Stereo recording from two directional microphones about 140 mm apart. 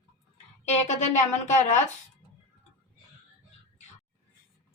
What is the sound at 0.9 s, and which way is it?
Speech, 55° left (ahead or behind).